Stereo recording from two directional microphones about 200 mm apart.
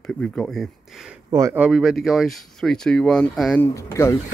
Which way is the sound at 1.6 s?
5° right (ahead or behind).